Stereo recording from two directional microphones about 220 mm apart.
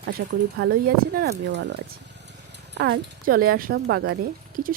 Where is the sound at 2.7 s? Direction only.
50° right (ahead or behind).